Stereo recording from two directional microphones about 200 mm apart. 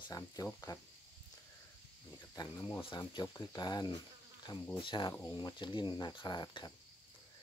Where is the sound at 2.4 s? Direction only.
20° left (ahead or behind).